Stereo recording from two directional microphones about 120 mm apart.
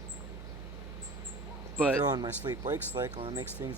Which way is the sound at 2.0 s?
35° right (ahead or behind).